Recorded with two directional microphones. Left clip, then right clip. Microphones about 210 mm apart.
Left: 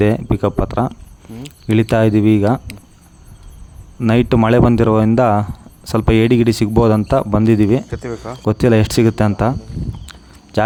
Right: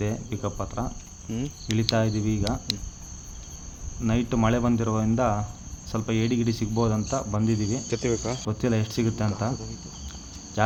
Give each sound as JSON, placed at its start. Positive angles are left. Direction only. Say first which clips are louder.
{"t": 0.0, "sound": "speech", "louder": "left 15 dB", "side_deg": 55}
{"t": 4.0, "sound": "speech", "louder": "left 11 dB", "side_deg": 55}
{"t": 7.9, "sound": "speech", "louder": "left 1 dB", "side_deg": -20}
{"t": 8.4, "sound": "speech", "louder": "left 17 dB", "side_deg": 55}